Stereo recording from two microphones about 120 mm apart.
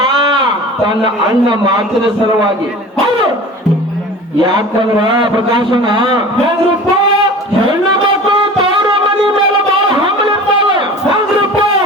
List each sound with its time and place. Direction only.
0.9 s a man's voice: 40° right (ahead or behind)
5.7 s a man's voice: 40° right (ahead or behind)